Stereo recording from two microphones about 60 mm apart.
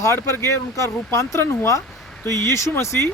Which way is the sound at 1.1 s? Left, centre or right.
Left.